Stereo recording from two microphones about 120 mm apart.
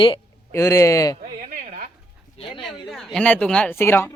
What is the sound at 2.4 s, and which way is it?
Speech, 55° left (ahead or behind).